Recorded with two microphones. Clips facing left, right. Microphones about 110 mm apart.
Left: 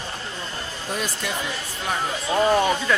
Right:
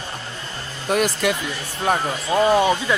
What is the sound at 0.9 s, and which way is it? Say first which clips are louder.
Speech: right 10 dB; 70° right (ahead or behind).